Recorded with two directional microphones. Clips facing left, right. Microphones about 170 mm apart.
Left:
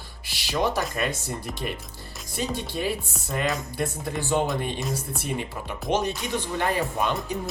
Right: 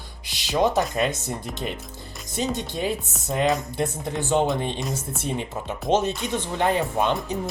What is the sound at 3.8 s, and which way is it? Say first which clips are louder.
Speech: right 2 dB; 20° right (ahead or behind).